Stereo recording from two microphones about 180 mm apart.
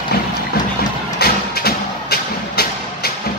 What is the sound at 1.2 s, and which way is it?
Music, 60° left (ahead or behind).